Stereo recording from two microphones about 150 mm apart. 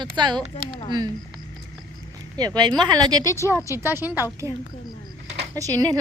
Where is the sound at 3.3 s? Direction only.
20° left (ahead or behind).